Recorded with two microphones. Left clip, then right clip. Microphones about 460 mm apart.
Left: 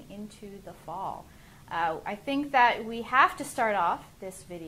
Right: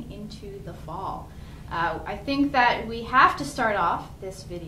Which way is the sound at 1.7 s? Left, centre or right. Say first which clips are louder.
Right 2 dB; left.